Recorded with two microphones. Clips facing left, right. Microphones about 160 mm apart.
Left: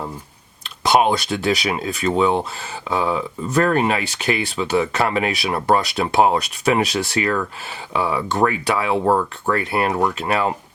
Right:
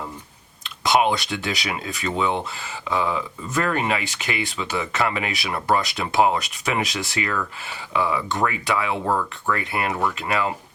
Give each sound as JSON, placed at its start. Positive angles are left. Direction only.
{"t": 0.9, "sound": "speech", "side_deg": 35}